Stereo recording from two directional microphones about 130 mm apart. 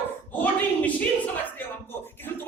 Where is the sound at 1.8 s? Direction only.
15° left (ahead or behind).